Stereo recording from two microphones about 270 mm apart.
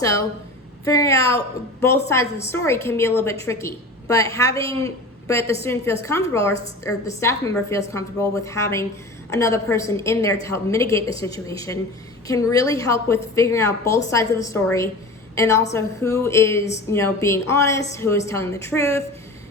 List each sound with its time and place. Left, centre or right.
0.0 s a woman's voice: centre